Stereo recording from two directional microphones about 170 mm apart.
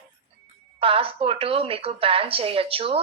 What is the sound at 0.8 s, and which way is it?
Speech, 35° right (ahead or behind).